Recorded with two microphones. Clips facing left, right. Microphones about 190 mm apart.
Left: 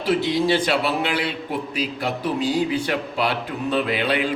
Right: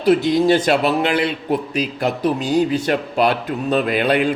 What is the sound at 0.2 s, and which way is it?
A man's voice, 45° right (ahead or behind).